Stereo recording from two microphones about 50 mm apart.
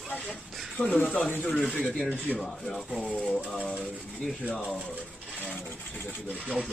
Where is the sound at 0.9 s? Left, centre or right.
Left.